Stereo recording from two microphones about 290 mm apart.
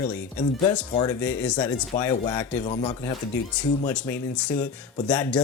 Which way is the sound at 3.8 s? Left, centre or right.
Centre.